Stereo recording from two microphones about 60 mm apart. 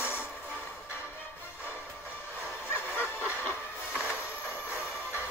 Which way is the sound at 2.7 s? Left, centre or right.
Left.